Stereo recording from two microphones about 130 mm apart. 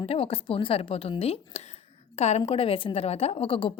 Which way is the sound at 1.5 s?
55° left (ahead or behind).